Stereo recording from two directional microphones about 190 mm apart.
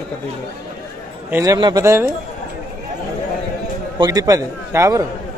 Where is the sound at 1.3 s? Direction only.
20° right (ahead or behind).